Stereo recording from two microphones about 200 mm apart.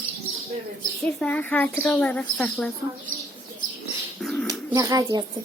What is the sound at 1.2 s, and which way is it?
A woman's voice, 5° left (ahead or behind).